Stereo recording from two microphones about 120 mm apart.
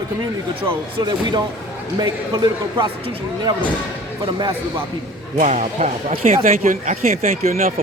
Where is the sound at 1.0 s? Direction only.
40° right (ahead or behind).